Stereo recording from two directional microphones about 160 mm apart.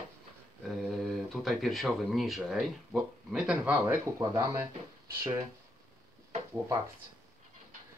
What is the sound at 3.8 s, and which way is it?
Speech, 20° right (ahead or behind).